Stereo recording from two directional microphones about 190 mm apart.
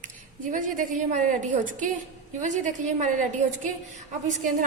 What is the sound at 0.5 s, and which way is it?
A woman's voice, 45° right (ahead or behind).